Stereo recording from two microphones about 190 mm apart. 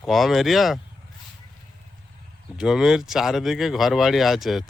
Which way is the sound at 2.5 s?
5° right (ahead or behind).